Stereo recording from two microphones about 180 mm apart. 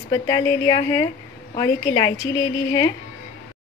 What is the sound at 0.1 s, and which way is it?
A woman's voice, 20° left (ahead or behind).